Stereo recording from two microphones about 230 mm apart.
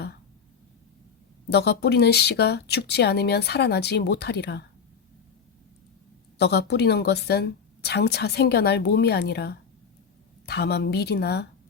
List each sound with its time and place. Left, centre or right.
1.5 s speech: left
6.4 s speech: left